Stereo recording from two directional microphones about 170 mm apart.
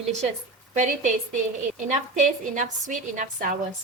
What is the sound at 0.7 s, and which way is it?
Speech, 45° right (ahead or behind).